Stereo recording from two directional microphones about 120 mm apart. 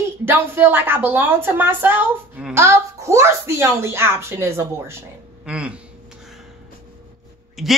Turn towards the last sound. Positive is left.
turn(degrees=0)  # may be behind; listen again after turning